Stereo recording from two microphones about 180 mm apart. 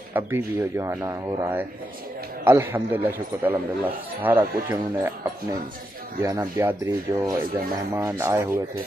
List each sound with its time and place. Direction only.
0.1 s a man's voice: 10° right (ahead or behind)